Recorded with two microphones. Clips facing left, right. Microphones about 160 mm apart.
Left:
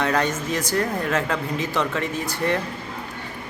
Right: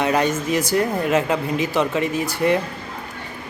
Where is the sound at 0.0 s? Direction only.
15° right (ahead or behind).